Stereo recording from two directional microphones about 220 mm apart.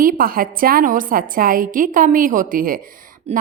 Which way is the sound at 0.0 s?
40° right (ahead or behind).